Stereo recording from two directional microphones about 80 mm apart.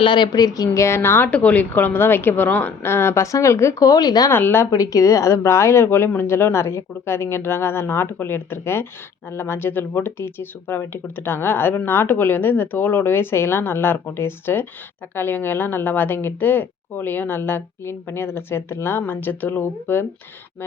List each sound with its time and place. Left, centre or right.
0.0 s speech: left
0.3 s a woman's voice: left
4.3 s a woman's voice: left
4.7 s a woman's voice: left